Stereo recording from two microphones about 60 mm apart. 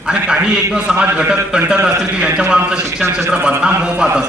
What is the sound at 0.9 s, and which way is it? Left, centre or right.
A man's voice, centre.